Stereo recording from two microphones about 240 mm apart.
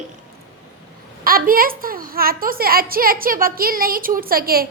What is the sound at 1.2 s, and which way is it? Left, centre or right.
A woman's voice, right.